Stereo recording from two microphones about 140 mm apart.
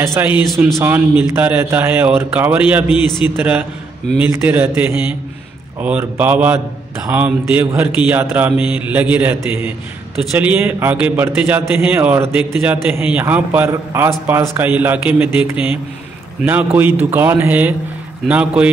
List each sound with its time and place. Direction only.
0.0 s a man's voice: 20° right (ahead or behind)